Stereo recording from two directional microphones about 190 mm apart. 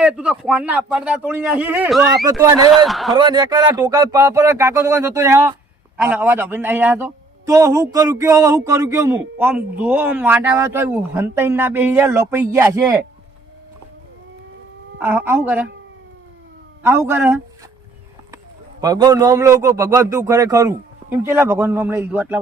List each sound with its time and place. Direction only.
0.0 s a man's voice: 5° right (ahead or behind)
2.4 s speech: 20° right (ahead or behind)
2.7 s a man's voice: centre (ahead or behind)
3.1 s a man's voice: 20° right (ahead or behind)
14.9 s a man's voice: 10° right (ahead or behind)
16.8 s a man's voice: 15° right (ahead or behind)
18.8 s a man's voice: 20° right (ahead or behind)